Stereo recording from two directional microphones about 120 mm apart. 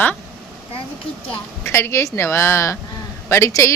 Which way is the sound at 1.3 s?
20° left (ahead or behind).